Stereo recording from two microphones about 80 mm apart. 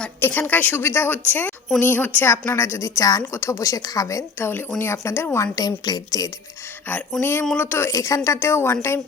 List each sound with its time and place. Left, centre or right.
0.2 s a woman's voice: left
3.3 s a woman's voice: left
4.4 s a woman's voice: left
5.5 s speech: left
7.2 s a woman's voice: left